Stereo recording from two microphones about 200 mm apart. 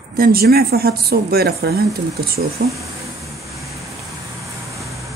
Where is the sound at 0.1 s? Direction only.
50° right (ahead or behind).